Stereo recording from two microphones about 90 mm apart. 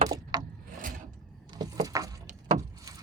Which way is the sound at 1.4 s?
45° right (ahead or behind).